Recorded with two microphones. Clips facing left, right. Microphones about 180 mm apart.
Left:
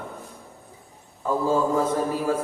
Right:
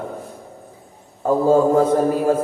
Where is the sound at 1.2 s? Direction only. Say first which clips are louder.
Right 8 dB; 55° right (ahead or behind).